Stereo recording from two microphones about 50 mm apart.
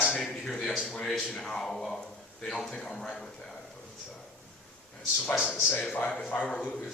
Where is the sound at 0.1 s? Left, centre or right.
Centre.